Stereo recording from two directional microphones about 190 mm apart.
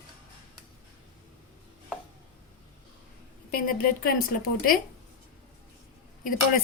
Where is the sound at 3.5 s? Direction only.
50° left (ahead or behind).